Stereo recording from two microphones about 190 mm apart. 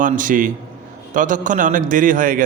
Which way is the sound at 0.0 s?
45° right (ahead or behind).